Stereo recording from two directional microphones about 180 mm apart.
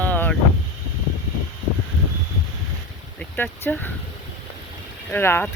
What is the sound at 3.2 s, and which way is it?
Speech, 10° left (ahead or behind).